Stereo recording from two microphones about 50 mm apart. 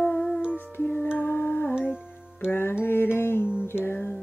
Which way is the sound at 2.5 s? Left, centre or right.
Left.